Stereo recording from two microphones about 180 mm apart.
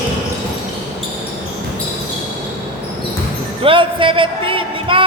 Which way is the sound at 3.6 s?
30° right (ahead or behind).